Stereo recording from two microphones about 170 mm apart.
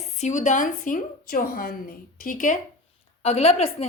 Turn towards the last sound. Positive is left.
turn(degrees=35)  # may be behind; listen again after turning